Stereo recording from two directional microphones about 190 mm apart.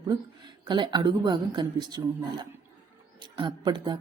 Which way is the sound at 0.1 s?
20° right (ahead or behind).